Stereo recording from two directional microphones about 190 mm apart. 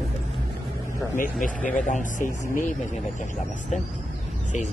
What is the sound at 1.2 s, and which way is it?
Speech, 45° left (ahead or behind).